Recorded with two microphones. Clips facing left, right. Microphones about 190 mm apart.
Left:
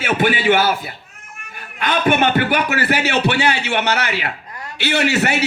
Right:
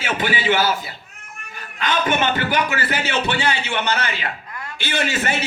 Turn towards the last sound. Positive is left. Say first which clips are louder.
# left 5 dB
turn(degrees=70)  # may be behind; listen again after turning